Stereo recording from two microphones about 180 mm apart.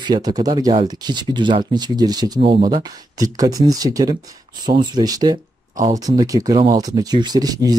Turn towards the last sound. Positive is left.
turn(degrees=-20)  # may be behind; listen again after turning